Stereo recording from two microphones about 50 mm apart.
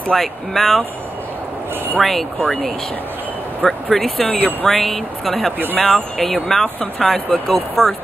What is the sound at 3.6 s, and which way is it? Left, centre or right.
Speech, centre.